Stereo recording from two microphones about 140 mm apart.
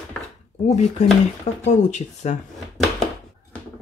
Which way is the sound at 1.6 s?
55° left (ahead or behind).